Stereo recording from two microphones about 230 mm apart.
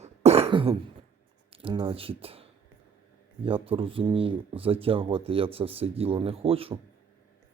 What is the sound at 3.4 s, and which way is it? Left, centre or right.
Speech, right.